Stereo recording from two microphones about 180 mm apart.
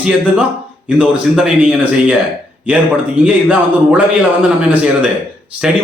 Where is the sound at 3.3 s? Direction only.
5° right (ahead or behind).